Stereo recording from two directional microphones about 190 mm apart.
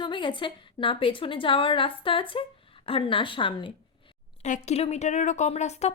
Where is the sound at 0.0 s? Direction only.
25° left (ahead or behind).